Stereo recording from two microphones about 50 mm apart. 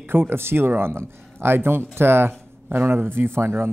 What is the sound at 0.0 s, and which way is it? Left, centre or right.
Speech, right.